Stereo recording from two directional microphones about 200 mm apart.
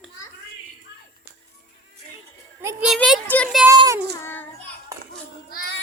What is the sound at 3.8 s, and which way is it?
Child singing, 15° right (ahead or behind).